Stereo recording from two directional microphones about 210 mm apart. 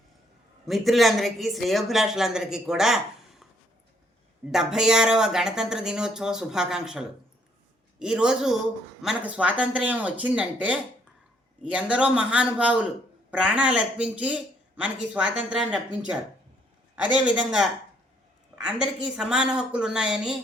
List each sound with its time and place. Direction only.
0.7 s speech: centre (ahead or behind)
4.5 s speech: 5° right (ahead or behind)
17.2 s speech: centre (ahead or behind)